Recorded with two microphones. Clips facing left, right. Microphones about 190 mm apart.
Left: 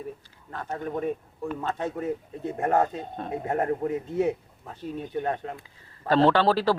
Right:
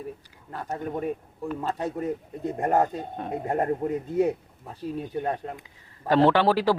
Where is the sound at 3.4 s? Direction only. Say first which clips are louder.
Right 1 dB; 30° right (ahead or behind).